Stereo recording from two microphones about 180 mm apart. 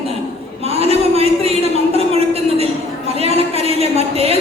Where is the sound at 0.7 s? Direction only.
35° right (ahead or behind).